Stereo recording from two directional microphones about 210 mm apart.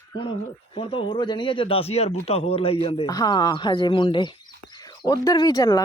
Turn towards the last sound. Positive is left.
turn(degrees=15)  # may be behind; listen again after turning